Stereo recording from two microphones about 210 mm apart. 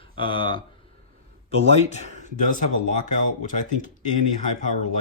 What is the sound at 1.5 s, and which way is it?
Speech, 30° left (ahead or behind).